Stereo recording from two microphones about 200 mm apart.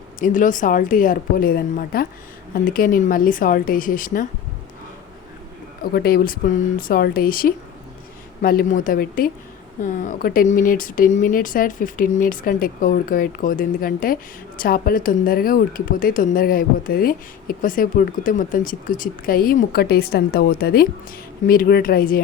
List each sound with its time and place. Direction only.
0.2 s speech: 40° left (ahead or behind)
5.9 s speech: 50° left (ahead or behind)